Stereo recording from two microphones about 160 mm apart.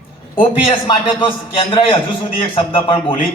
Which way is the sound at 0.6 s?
35° left (ahead or behind).